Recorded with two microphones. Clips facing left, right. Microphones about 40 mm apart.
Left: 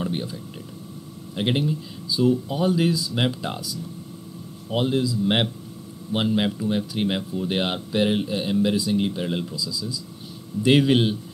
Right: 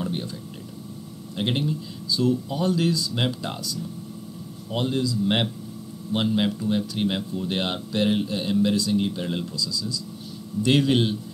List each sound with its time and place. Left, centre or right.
0.0 s speech: centre